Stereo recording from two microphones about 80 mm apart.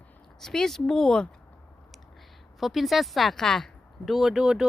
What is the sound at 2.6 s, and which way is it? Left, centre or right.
Speech, centre.